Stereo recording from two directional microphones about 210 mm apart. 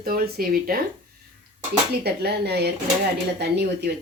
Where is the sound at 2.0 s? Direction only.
50° right (ahead or behind).